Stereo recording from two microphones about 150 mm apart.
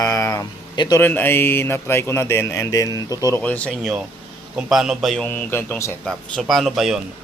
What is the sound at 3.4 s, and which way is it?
Speech, 10° left (ahead or behind).